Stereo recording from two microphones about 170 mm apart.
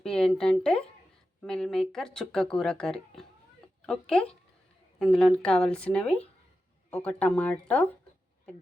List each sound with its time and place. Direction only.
0.0 s speech: 5° left (ahead or behind)